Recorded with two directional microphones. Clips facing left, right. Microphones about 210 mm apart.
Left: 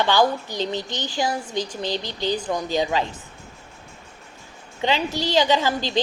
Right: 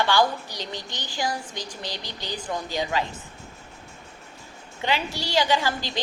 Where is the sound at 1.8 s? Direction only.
20° left (ahead or behind).